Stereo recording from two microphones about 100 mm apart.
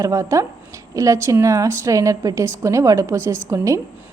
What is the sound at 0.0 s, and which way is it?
A woman's voice, 35° right (ahead or behind).